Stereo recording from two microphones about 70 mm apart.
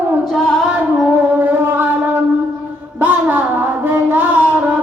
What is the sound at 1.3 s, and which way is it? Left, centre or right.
Music, right.